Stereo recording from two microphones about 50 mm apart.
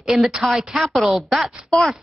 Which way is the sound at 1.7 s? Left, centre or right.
Centre.